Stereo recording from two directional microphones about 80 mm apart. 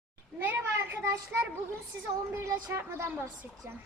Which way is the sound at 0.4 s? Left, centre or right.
Right.